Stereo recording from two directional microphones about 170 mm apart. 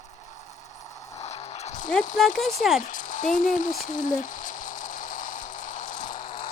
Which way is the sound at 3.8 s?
50° left (ahead or behind).